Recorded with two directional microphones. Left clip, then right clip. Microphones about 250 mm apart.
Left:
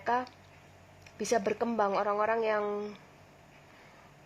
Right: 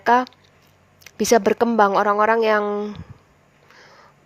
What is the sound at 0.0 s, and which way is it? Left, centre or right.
A woman's voice, right.